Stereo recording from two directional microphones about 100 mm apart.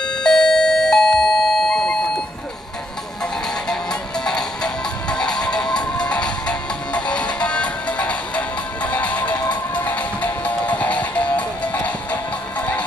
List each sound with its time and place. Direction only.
0.0 s doorbell: 5° left (ahead or behind)
4.2 s music: 5° left (ahead or behind)